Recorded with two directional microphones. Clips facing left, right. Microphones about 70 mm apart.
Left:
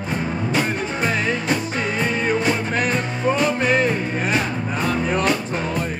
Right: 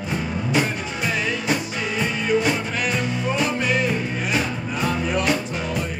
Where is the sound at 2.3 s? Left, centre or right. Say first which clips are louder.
Left 1 dB; left.